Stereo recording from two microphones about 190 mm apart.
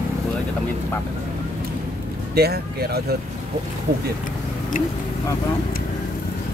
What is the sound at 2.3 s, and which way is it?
Speech, 55° right (ahead or behind).